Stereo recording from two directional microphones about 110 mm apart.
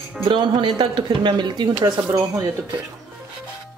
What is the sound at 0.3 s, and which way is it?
Speech, 50° right (ahead or behind).